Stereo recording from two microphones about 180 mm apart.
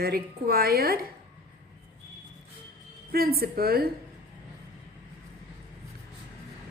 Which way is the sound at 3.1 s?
55° right (ahead or behind).